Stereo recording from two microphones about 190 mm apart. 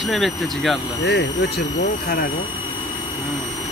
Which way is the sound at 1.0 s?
60° left (ahead or behind).